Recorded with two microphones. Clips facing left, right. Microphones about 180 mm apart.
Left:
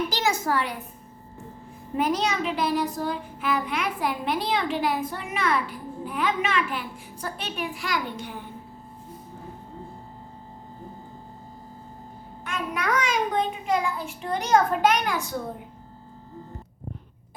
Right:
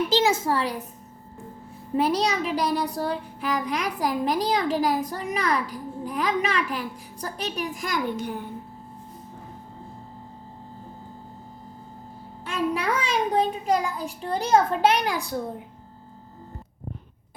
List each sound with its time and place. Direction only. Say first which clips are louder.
0.1 s a woman's voice: right 4 dB; 25° right (ahead or behind)
2.0 s a child's voice: right 2 dB; 35° right (ahead or behind)
12.5 s a child's voice: right 3 dB; 30° right (ahead or behind)